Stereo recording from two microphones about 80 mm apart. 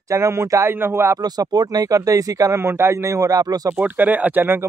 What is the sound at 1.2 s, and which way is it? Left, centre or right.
Speech, right.